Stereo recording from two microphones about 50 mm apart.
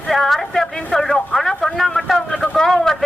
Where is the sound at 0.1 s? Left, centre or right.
Centre.